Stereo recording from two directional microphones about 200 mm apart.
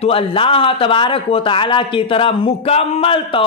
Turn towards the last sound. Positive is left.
turn(degrees=25)  # may be behind; listen again after turning